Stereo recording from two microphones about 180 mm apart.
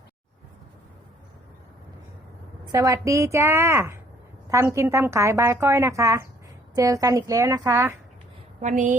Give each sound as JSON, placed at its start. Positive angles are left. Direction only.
{"t": 2.7, "sound": "a woman's voice", "side_deg": -15}
{"t": 8.6, "sound": "a woman's voice", "side_deg": -45}